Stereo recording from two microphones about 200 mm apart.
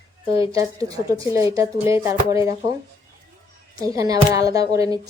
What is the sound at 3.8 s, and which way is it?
Speech, 15° right (ahead or behind).